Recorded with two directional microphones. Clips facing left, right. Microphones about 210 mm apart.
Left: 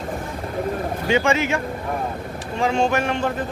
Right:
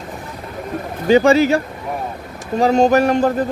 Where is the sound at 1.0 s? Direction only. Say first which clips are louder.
Right 9 dB; 35° right (ahead or behind).